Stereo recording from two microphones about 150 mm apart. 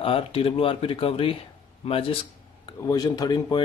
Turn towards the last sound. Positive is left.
turn(degrees=30)  # may be behind; listen again after turning